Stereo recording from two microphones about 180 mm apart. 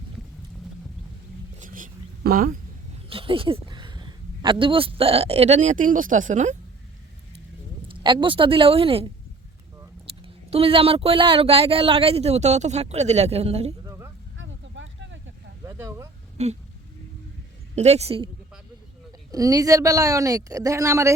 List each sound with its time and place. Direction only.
1.5 s whispering: 45° right (ahead or behind)
3.1 s speech: 30° right (ahead or behind)
7.9 s a woman's voice: 25° right (ahead or behind)
10.5 s speech: 30° right (ahead or behind)
13.8 s a sound: 15° right (ahead or behind)
14.3 s a sound: 90° right
15.6 s a sound: 15° right (ahead or behind)
16.4 s speech: 35° right (ahead or behind)
17.7 s speech: 35° right (ahead or behind)
19.3 s a woman's voice: 20° right (ahead or behind)